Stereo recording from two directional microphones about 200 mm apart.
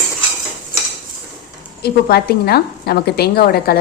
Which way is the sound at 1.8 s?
50° left (ahead or behind).